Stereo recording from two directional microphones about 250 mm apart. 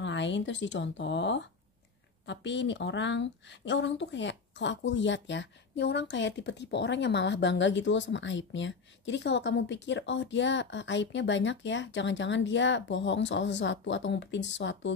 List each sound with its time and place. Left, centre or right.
0.0 s a woman's voice: left